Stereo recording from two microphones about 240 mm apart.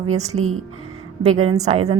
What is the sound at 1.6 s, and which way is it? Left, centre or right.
Speech, right.